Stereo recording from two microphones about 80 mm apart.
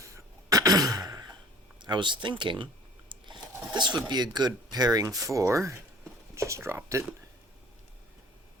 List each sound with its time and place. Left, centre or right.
0.5 s a sound: right
1.8 s speech: right
3.1 s crunch: right
3.8 s speech: right